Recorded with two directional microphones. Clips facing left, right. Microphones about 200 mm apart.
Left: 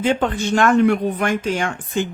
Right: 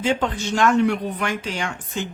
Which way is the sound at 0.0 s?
55° left (ahead or behind).